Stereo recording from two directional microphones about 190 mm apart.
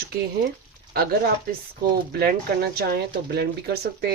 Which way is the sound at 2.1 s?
55° right (ahead or behind).